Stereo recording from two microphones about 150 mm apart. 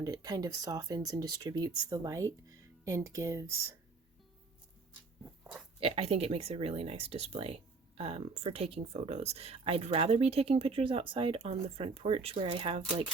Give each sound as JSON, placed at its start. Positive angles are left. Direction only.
{"t": 0.0, "sound": "speech", "side_deg": -25}
{"t": 5.2, "sound": "a sound", "side_deg": -10}
{"t": 5.8, "sound": "speech", "side_deg": -40}